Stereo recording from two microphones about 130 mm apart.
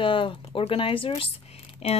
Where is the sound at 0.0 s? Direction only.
40° left (ahead or behind).